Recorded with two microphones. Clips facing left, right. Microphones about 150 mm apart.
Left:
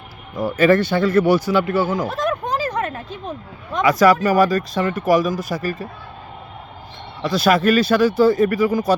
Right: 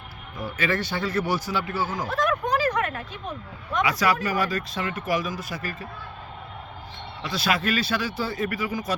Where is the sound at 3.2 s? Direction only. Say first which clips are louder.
Left 4 dB; 45° left (ahead or behind).